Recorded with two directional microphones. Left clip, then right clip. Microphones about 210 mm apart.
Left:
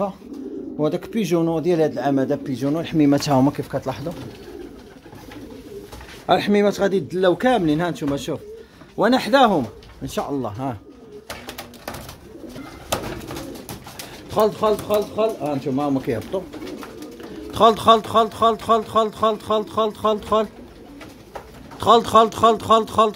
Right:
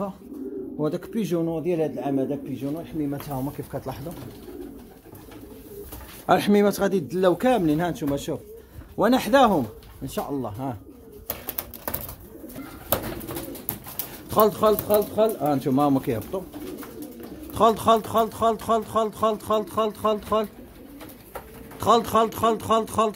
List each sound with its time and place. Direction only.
0.7 s speech: 5° left (ahead or behind)
1.3 s a man's voice: 15° left (ahead or behind)
2.6 s speech: 40° left (ahead or behind)
3.7 s speech: 10° left (ahead or behind)
6.2 s speech: 10° right (ahead or behind)
11.2 s bird: 30° right (ahead or behind)
14.3 s speech: 20° right (ahead or behind)
16.0 s speech: 10° right (ahead or behind)
17.6 s speech: centre (ahead or behind)
21.7 s speech: centre (ahead or behind)